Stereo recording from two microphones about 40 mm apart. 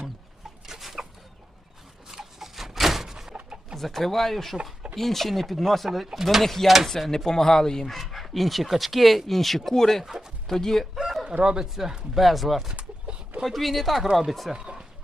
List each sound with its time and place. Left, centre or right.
0.6 s chicken: centre
2.0 s a sound: centre
3.3 s a sound: right
3.8 s speech: centre
7.1 s speech: centre
7.9 s speech: centre
10.0 s bird: centre
10.4 s speech: centre
10.9 s chicken: centre
11.6 s speech: centre
13.1 s a sound: right
13.4 s speech: centre
14.5 s a sound: centre